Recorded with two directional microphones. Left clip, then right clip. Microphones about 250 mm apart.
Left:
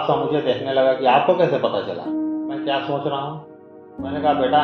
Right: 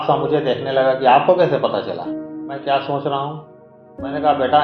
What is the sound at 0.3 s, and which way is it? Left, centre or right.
A man's voice, right.